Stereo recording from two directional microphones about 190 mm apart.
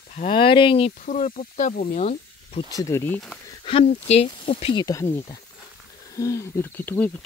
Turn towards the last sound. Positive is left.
turn(degrees=10)  # may be behind; listen again after turning